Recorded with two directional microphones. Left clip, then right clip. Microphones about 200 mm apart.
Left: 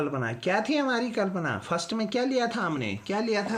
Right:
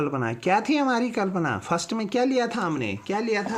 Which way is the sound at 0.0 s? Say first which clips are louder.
Right 3 dB; 35° right (ahead or behind).